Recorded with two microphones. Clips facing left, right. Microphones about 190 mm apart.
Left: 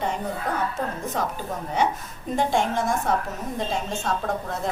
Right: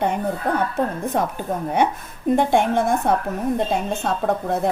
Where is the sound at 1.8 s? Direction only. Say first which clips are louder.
Right 4 dB; 55° right (ahead or behind).